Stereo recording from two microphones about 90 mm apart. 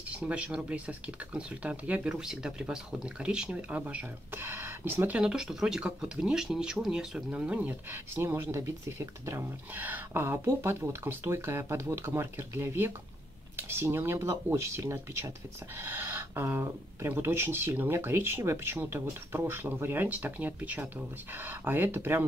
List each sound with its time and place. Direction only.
0.1 s speech: 15° right (ahead or behind)
5.2 s speech: 10° right (ahead or behind); by 22.2 s 25° right (ahead or behind)